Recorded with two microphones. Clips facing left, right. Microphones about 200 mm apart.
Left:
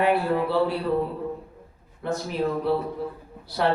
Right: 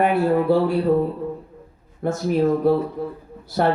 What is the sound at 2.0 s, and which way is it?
Speech, 45° right (ahead or behind).